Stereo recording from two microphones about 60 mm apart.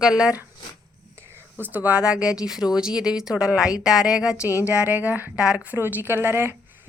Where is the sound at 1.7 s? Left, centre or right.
Right.